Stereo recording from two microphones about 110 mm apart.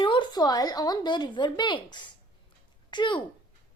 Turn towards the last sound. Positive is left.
turn(degrees=45)  # may be behind; listen again after turning